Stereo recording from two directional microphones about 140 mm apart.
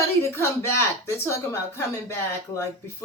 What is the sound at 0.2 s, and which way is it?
Speech, 20° left (ahead or behind).